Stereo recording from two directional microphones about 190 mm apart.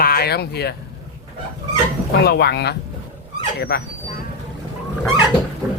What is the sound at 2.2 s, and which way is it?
Speech, 55° left (ahead or behind).